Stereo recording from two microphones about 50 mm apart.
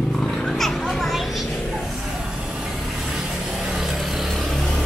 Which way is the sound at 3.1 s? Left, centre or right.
Centre.